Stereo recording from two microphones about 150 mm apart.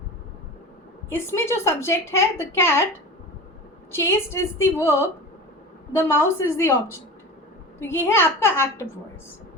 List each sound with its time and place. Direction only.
1.1 s a woman's voice: 15° left (ahead or behind)
3.9 s a woman's voice: 15° left (ahead or behind)